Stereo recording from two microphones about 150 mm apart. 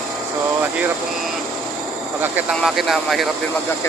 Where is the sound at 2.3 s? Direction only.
5° right (ahead or behind).